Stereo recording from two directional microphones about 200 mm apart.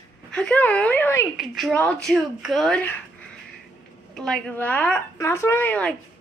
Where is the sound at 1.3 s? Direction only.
Centre (ahead or behind).